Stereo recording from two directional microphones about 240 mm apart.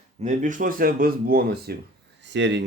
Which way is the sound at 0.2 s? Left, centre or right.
Right.